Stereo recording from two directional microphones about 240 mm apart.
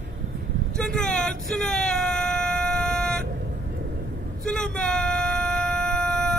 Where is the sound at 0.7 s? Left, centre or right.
Centre.